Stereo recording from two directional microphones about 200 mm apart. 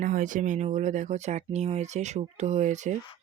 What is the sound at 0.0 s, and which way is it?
Speech, 40° right (ahead or behind).